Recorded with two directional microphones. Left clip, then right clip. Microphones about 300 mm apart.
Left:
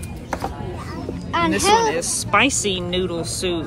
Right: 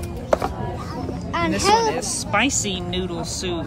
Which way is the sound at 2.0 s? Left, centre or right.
Centre.